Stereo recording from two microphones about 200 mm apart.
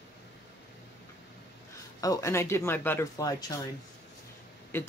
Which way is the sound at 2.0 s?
15° left (ahead or behind).